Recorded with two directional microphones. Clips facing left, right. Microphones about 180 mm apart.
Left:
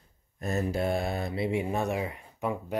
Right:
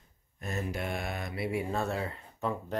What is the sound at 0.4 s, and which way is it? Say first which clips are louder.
Speech: left 6 dB; 35° left (ahead or behind).